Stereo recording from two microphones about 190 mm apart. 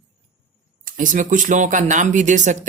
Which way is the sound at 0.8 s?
45° right (ahead or behind).